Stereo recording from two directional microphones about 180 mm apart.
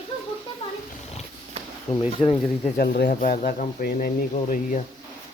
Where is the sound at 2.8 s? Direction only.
60° left (ahead or behind).